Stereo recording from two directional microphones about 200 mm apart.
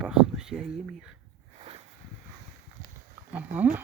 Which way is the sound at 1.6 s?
30° right (ahead or behind).